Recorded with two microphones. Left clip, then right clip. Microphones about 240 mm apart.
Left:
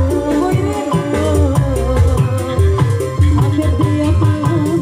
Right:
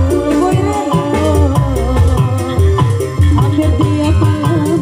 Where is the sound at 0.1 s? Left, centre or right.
Right.